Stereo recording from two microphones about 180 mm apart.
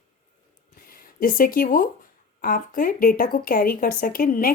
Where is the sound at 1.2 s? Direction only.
50° left (ahead or behind).